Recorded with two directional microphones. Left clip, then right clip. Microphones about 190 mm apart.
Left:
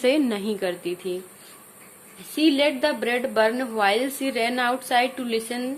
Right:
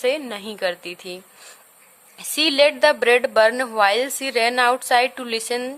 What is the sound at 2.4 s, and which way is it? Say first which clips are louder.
A woman's voice: right 5 dB; 35° right (ahead or behind).